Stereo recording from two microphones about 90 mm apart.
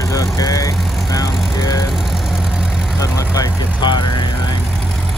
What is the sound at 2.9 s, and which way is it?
Vehicle, 40° left (ahead or behind).